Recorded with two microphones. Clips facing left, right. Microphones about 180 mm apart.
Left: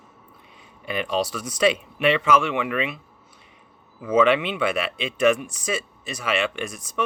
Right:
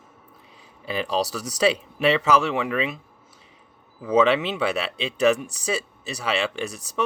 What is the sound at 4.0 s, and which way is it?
Speech, 35° right (ahead or behind).